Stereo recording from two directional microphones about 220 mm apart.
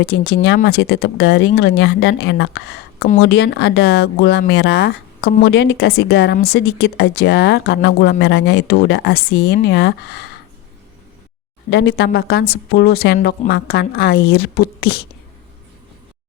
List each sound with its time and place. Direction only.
0.0 s speech: 50° left (ahead or behind)
11.7 s speech: 55° left (ahead or behind)